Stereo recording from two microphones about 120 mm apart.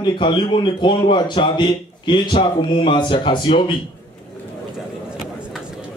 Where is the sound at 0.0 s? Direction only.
40° left (ahead or behind).